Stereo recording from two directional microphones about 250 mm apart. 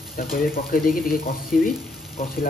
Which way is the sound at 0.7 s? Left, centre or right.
Left.